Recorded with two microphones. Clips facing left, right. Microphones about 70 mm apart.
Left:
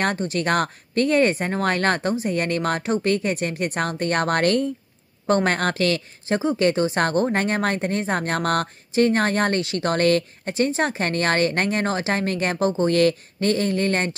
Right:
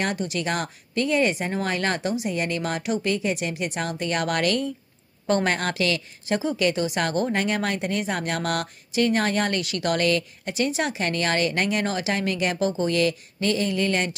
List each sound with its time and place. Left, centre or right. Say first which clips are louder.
0.0 s a woman's voice: left 3 dB; left